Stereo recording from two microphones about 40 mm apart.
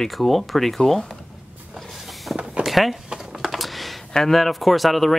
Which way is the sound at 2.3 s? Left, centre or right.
Centre.